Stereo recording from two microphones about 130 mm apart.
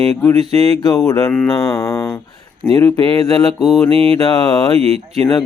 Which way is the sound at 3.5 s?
Centre (ahead or behind).